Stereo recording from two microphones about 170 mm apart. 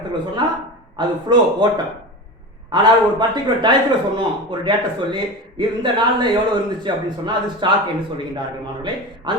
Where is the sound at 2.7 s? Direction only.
25° right (ahead or behind).